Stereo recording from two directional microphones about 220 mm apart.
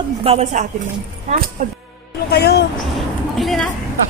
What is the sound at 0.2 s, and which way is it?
Speech, 25° right (ahead or behind).